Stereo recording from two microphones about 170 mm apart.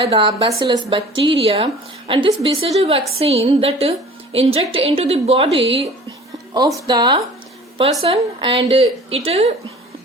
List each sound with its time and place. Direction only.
0.0 s a woman's voice: 30° right (ahead or behind)
6.1 s a woman's voice: 25° right (ahead or behind)